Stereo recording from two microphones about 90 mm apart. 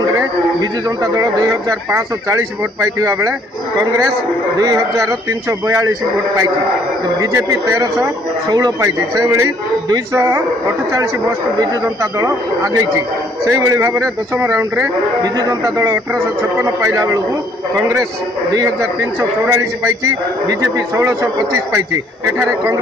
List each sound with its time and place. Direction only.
0.0 s a man's voice: 50° right (ahead or behind)
4.6 s a man's voice: 40° right (ahead or behind)
7.3 s speech: 30° right (ahead or behind)
7.8 s a man's voice: 45° right (ahead or behind)
13.5 s a man's voice: 30° right (ahead or behind)
15.2 s a man's voice: 40° right (ahead or behind)